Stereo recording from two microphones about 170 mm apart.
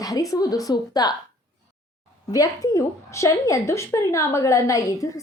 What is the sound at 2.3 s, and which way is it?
A woman's voice, 20° left (ahead or behind).